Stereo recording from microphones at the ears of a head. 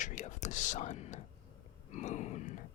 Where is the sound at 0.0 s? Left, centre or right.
Left.